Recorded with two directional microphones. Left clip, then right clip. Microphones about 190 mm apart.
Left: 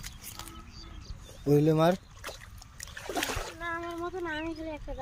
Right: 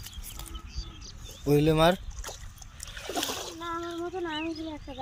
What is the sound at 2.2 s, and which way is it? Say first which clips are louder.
Dog: even; 35° right (ahead or behind).